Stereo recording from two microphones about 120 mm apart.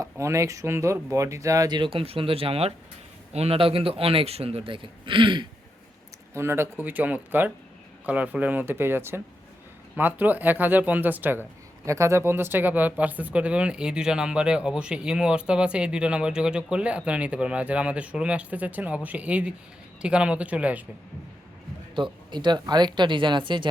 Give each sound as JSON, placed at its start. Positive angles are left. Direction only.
{"t": 0.0, "sound": "a man's voice", "side_deg": -25}
{"t": 6.3, "sound": "speech", "side_deg": -20}
{"t": 21.9, "sound": "speech", "side_deg": -40}